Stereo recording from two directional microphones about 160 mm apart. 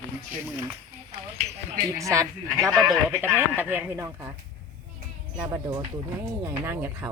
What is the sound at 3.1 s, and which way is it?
Speech, 10° right (ahead or behind).